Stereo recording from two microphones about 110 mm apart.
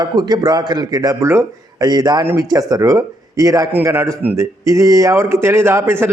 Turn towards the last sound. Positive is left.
turn(degrees=-25)  # may be behind; listen again after turning